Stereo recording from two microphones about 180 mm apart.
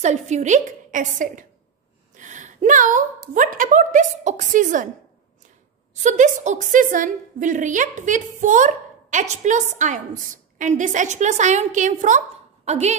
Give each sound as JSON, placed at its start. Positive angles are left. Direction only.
{"t": 0.0, "sound": "a woman's voice", "side_deg": -40}
{"t": 6.0, "sound": "a woman's voice", "side_deg": -40}